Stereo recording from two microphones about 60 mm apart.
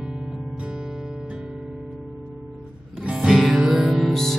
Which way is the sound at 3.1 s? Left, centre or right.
Centre.